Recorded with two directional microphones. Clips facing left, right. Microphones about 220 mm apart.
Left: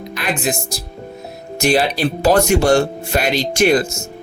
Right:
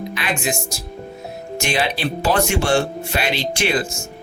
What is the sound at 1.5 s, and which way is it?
Speech, 40° left (ahead or behind).